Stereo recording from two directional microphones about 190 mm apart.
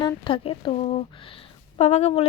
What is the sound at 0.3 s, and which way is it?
Speech, 25° left (ahead or behind).